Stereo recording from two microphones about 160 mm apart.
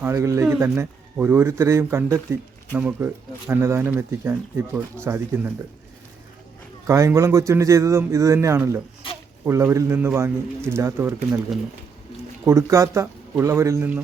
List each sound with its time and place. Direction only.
0.0 s speech: 20° right (ahead or behind)
6.8 s a man's voice: 20° right (ahead or behind)
12.5 s speech: 20° right (ahead or behind)